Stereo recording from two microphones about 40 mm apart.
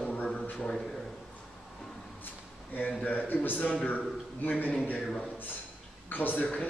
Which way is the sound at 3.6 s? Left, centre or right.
Left.